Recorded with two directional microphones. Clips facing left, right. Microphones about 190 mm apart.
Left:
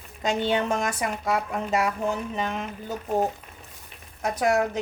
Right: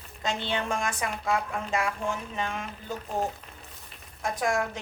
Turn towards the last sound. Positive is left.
turn(degrees=40)  # may be behind; listen again after turning